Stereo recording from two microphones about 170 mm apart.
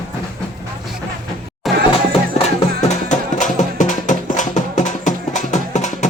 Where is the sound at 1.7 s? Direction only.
Centre (ahead or behind).